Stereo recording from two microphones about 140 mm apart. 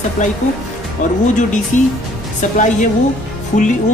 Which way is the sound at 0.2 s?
65° left (ahead or behind).